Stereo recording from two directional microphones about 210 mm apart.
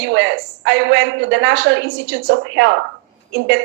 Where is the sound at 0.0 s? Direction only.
60° right (ahead or behind).